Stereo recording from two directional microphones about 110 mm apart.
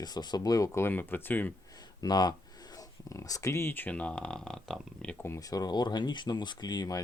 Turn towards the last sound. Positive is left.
turn(degrees=35)  # may be behind; listen again after turning